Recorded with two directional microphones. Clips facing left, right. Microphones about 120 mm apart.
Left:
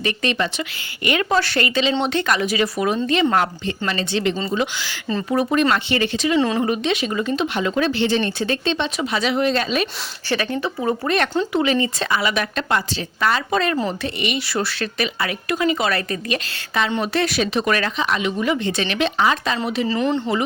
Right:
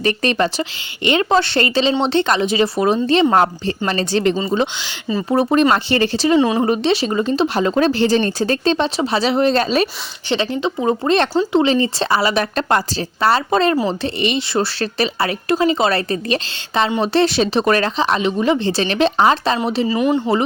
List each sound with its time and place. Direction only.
0.0 s speech: 40° right (ahead or behind)
4.5 s speech: 25° right (ahead or behind)
10.2 s speech: 25° right (ahead or behind)
19.9 s speech: 10° right (ahead or behind)